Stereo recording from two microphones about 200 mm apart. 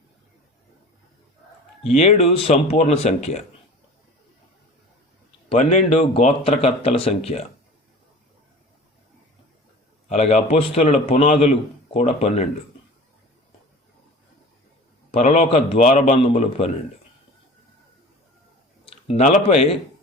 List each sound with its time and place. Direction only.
2.0 s speech: 30° left (ahead or behind)
5.5 s speech: 35° left (ahead or behind)
10.1 s speech: 35° left (ahead or behind)
15.2 s speech: 35° left (ahead or behind)
18.9 s speech: 30° left (ahead or behind)